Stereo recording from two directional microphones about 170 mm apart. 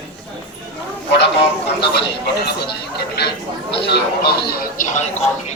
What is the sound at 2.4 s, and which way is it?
Speech, 70° left (ahead or behind).